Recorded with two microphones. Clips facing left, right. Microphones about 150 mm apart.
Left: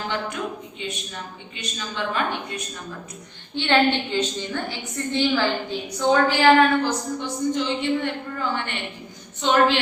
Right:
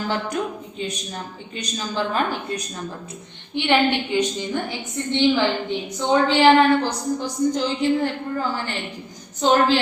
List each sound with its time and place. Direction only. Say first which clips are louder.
0.8 s a woman's voice: right 7 dB; 40° right (ahead or behind)
3.5 s a woman's voice: right 1 dB; 15° right (ahead or behind); by 9.8 s 35° right (ahead or behind)